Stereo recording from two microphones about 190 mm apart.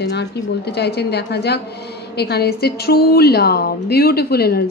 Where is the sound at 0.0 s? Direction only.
60° left (ahead or behind).